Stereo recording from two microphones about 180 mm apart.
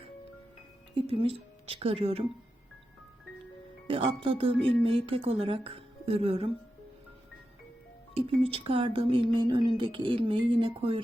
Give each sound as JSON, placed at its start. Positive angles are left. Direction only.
{"t": 1.0, "sound": "speech", "side_deg": -30}
{"t": 3.8, "sound": "speech", "side_deg": -30}
{"t": 8.1, "sound": "speech", "side_deg": -30}